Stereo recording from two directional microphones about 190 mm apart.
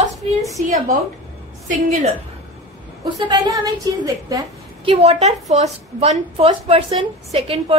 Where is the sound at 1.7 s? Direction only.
40° right (ahead or behind).